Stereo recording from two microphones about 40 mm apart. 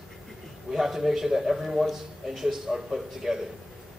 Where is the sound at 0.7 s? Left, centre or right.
Centre.